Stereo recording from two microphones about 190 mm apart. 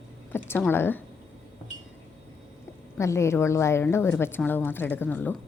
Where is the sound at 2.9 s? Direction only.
15° left (ahead or behind).